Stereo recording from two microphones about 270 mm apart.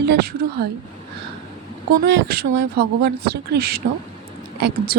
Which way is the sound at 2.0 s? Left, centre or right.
Right.